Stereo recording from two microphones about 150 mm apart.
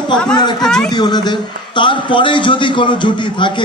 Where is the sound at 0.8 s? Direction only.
30° left (ahead or behind).